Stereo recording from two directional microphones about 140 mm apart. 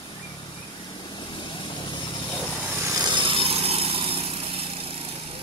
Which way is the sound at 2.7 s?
20° right (ahead or behind).